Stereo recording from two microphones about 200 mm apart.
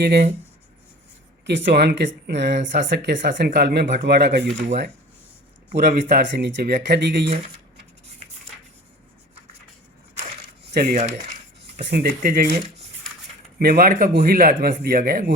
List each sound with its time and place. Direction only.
0.0 s speech: 55° right (ahead or behind)
1.5 s speech: 60° right (ahead or behind)
5.6 s speech: 45° right (ahead or behind)
10.6 s speech: 45° right (ahead or behind)
11.6 s speech: 55° right (ahead or behind)